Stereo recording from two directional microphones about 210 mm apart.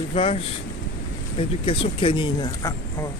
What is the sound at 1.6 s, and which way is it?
Speech, 25° left (ahead or behind).